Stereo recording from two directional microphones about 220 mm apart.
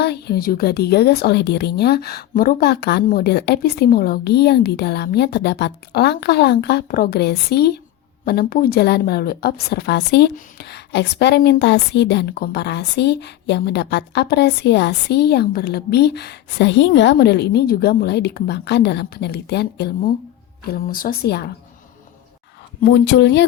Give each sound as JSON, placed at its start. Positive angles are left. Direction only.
{"t": 0.0, "sound": "a woman's voice", "side_deg": 50}
{"t": 22.8, "sound": "a woman's voice", "side_deg": 50}